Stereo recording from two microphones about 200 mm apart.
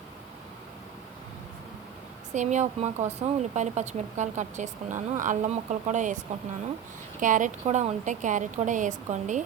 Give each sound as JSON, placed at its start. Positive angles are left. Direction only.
{"t": 2.3, "sound": "speech", "side_deg": -35}